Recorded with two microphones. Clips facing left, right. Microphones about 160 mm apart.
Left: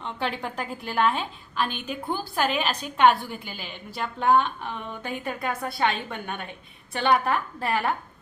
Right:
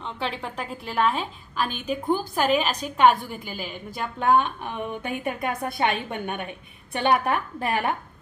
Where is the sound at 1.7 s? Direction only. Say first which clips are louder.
Right 5 dB; 40° right (ahead or behind).